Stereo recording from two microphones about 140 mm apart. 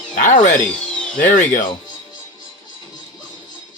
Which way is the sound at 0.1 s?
65° left (ahead or behind).